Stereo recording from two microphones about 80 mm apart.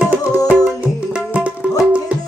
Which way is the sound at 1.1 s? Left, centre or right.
Centre.